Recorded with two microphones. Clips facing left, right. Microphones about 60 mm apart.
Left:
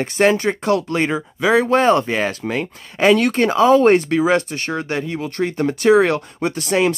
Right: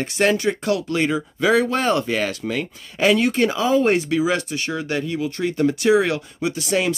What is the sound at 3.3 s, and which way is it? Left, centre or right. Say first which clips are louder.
A man's voice: left 5 dB; left.